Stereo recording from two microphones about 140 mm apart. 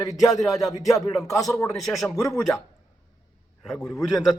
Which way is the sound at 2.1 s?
20° left (ahead or behind).